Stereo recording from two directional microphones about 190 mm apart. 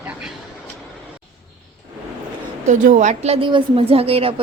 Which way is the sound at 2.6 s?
40° right (ahead or behind).